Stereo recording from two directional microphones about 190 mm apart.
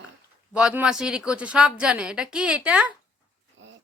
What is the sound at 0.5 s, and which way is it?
A woman's voice, 5° right (ahead or behind).